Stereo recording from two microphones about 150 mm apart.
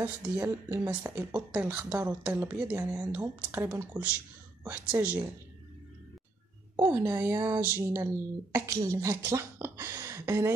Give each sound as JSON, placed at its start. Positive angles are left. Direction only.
{"t": 0.0, "sound": "speech", "side_deg": -15}
{"t": 6.8, "sound": "speech", "side_deg": -15}